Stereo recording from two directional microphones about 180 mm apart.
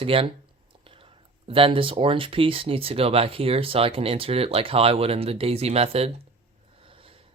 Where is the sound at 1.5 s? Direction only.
30° right (ahead or behind).